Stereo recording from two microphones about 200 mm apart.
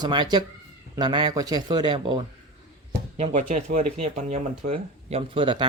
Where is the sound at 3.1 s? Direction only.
35° right (ahead or behind).